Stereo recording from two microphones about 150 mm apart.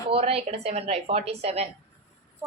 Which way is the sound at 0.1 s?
40° right (ahead or behind).